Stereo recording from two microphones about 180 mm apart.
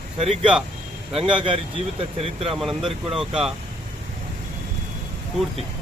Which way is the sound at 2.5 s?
Centre (ahead or behind).